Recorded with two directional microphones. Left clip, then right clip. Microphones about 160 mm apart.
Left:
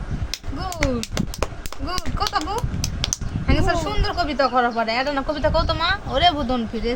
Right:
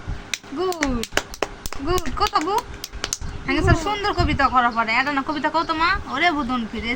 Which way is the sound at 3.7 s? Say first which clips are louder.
Right 1 dB; 75° left (ahead or behind).